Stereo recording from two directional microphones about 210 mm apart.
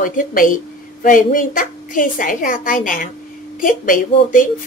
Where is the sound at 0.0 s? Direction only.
40° left (ahead or behind).